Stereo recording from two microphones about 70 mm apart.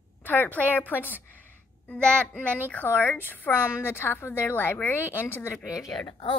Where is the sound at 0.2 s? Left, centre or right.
Left.